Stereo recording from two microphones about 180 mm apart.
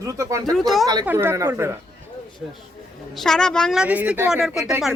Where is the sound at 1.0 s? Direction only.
15° right (ahead or behind).